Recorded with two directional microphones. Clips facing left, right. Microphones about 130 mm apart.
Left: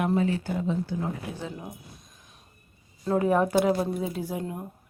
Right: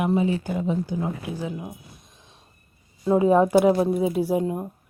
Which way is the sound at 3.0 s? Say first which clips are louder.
Right 5 dB; 15° right (ahead or behind).